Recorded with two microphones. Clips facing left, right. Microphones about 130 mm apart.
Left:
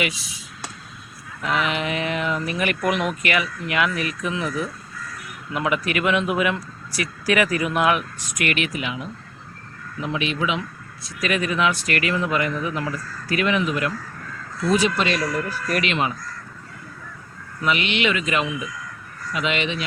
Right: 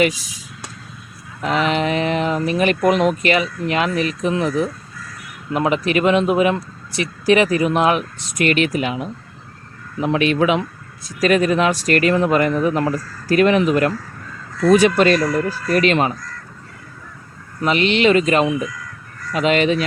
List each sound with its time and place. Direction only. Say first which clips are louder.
1.4 s speech: right 5 dB; 35° right (ahead or behind); by 10.6 s 50° right (ahead or behind)
11.2 s speech: right 7 dB; 40° right (ahead or behind)
14.6 s speech: right 8 dB; 60° right (ahead or behind); by 16.1 s 40° right (ahead or behind)
17.6 s speech: right 6 dB; 35° right (ahead or behind)